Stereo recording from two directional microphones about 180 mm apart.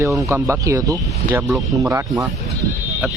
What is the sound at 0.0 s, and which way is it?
Speech, 20° right (ahead or behind).